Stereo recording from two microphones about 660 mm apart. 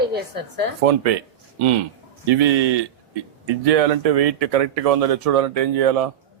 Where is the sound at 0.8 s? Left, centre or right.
Right.